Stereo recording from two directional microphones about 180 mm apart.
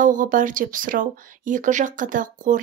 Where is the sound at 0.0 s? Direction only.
45° right (ahead or behind).